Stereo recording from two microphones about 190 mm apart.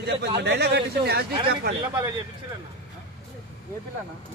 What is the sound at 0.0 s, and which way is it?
A man's voice, 60° right (ahead or behind).